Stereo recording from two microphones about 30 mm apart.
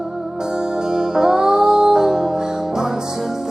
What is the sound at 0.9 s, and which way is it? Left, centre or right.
Music, right.